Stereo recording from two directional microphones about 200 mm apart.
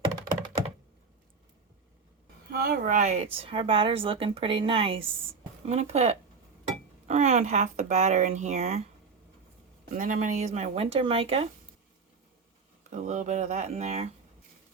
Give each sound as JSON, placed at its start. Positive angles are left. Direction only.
{"t": 2.5, "sound": "speech", "side_deg": -50}
{"t": 3.3, "sound": "a woman's voice", "side_deg": -25}
{"t": 10.0, "sound": "speech", "side_deg": -40}
{"t": 12.9, "sound": "speech", "side_deg": -35}